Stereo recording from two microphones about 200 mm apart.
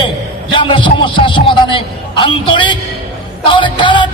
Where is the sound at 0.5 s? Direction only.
25° left (ahead or behind).